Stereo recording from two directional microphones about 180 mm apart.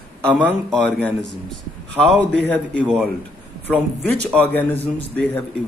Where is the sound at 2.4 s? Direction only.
5° left (ahead or behind).